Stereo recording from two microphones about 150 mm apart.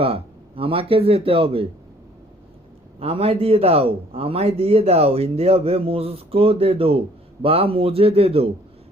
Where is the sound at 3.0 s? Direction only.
40° right (ahead or behind).